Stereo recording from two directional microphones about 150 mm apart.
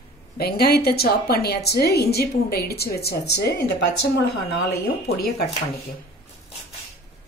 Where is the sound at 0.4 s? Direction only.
90° left.